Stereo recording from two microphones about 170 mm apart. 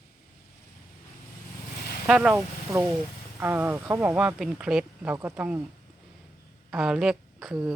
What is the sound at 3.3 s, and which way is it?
Speech, 10° right (ahead or behind).